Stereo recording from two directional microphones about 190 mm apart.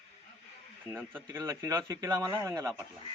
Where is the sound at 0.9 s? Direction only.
10° right (ahead or behind).